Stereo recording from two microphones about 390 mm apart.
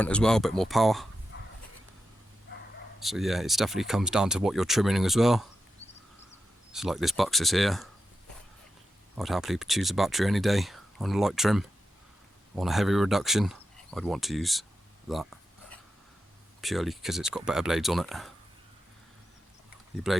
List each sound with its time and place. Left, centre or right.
0.0 s speech: centre
1.3 s a sound: left
3.0 s speech: centre
6.7 s speech: centre
9.1 s speech: centre
15.1 s a sound: centre
16.6 s speech: centre